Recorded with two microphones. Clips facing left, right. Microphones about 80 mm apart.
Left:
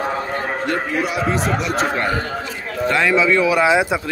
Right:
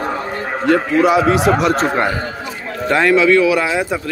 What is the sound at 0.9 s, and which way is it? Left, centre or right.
Speech, right.